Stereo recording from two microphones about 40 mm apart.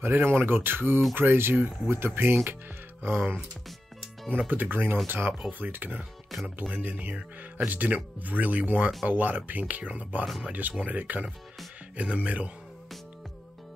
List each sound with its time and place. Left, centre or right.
0.0 s speech: right
2.0 s speech: right
3.0 s speech: right
4.5 s speech: right
6.3 s speech: centre
6.7 s speech: right